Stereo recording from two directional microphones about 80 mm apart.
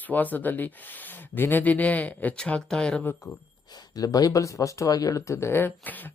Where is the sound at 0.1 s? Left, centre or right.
Left.